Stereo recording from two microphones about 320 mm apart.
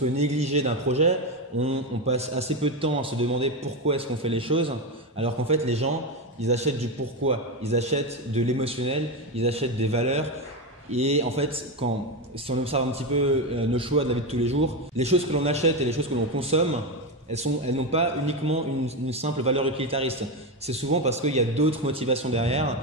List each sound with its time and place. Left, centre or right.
0.2 s a man's voice: centre